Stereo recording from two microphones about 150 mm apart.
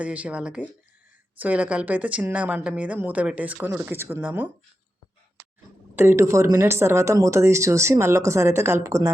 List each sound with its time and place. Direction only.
0.0 s speech: 10° right (ahead or behind)
6.0 s speech: 15° right (ahead or behind)